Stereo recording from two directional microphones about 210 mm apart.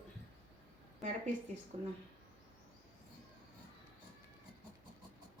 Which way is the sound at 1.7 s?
30° right (ahead or behind).